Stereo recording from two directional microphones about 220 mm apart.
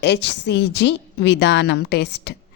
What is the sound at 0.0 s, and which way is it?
A woman's voice, 50° left (ahead or behind).